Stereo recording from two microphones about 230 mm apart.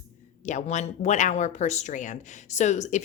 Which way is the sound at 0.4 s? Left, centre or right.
Left.